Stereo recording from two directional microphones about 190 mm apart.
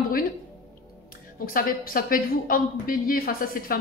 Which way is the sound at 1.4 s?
50° left (ahead or behind).